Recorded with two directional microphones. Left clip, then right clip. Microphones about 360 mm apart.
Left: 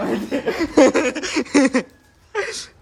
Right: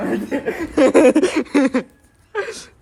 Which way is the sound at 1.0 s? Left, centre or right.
Centre.